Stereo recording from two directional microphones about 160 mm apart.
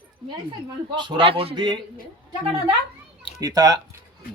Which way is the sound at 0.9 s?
30° right (ahead or behind).